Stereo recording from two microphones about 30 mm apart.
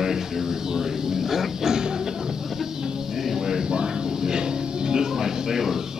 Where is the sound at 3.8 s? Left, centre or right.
Right.